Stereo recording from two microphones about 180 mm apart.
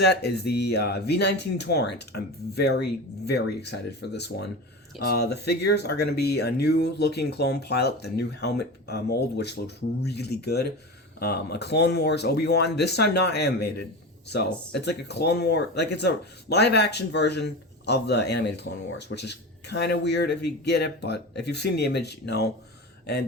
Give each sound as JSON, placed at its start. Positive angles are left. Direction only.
{"t": 0.0, "sound": "speech", "side_deg": 65}